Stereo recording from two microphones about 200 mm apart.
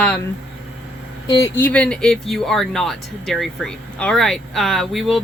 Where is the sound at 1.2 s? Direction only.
20° left (ahead or behind).